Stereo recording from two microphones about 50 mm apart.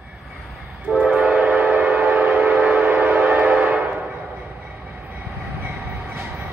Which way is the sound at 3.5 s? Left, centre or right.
Centre.